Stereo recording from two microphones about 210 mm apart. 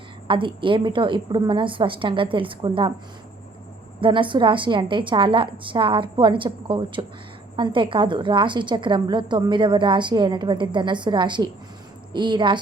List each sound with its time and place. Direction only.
0.3 s a woman's voice: 25° right (ahead or behind)
4.0 s a woman's voice: 25° right (ahead or behind)